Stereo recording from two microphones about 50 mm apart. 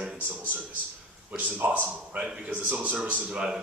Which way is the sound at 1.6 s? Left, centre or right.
Right.